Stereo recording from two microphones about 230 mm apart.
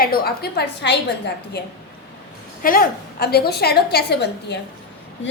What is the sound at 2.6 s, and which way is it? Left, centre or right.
A woman's voice, left.